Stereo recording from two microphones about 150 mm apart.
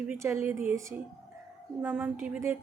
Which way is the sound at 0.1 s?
15° right (ahead or behind).